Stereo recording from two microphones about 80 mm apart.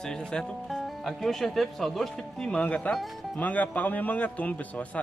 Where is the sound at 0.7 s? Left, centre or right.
Centre.